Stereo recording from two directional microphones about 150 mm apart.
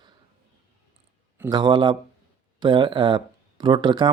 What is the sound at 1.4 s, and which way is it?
A man's voice, 30° right (ahead or behind).